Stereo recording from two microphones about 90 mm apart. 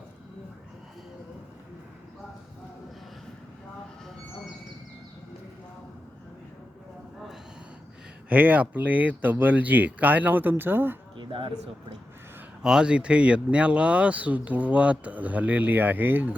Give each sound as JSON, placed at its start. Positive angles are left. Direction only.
{"t": 8.3, "sound": "speech", "side_deg": -15}
{"t": 11.2, "sound": "speech", "side_deg": -70}
{"t": 12.6, "sound": "speech", "side_deg": -10}